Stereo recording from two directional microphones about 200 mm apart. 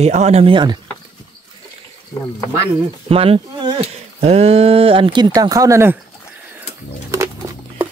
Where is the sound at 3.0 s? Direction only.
30° right (ahead or behind).